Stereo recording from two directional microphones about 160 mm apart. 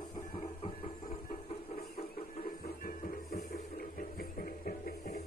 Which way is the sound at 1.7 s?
40° left (ahead or behind).